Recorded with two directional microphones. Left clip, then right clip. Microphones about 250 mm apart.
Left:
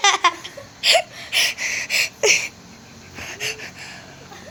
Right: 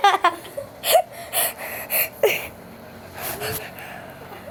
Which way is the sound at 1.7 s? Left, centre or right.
Right.